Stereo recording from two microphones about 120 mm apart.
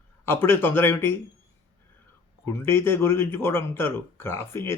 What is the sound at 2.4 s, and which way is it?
Speech, 20° left (ahead or behind).